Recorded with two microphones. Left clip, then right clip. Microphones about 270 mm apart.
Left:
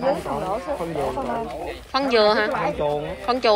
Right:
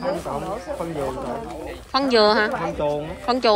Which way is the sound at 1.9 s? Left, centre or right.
Centre.